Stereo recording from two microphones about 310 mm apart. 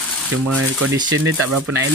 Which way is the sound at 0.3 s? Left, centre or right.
Right.